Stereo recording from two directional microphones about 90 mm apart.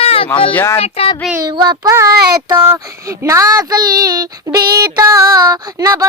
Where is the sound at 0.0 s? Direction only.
90° left.